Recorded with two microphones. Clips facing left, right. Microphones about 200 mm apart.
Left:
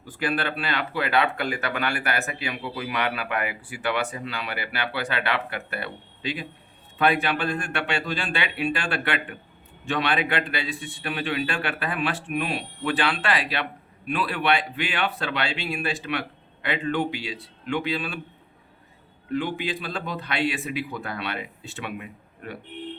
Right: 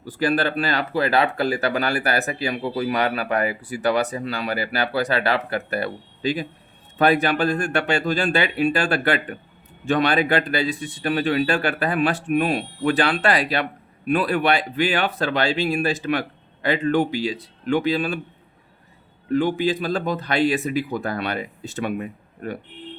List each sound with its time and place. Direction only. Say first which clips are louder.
0.0 s speech: right 6 dB; 40° right (ahead or behind)
19.3 s speech: right 7 dB; 45° right (ahead or behind)